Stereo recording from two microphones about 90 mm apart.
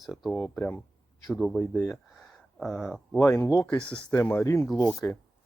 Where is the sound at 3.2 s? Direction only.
30° left (ahead or behind).